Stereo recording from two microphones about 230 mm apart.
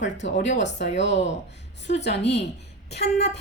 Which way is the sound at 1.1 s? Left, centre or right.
Left.